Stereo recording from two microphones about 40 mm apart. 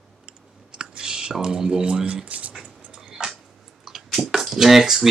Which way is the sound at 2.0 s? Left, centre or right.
Right.